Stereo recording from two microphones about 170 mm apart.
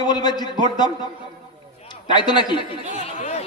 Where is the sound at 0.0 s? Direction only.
25° left (ahead or behind).